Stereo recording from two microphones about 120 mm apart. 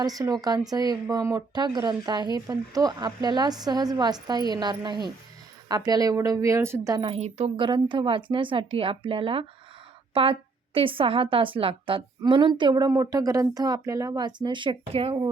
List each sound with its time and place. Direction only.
0.0 s a woman's voice: 30° right (ahead or behind)
1.5 s a woman's voice: 35° right (ahead or behind)
6.9 s a woman's voice: 45° right (ahead or behind)
7.2 s a woman's voice: 60° right (ahead or behind)
10.8 s a woman's voice: 45° right (ahead or behind)